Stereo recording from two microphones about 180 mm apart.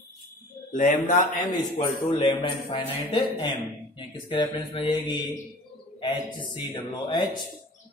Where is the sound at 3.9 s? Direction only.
25° left (ahead or behind).